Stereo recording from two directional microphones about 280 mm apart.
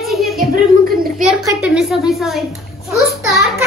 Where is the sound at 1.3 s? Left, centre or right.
Centre.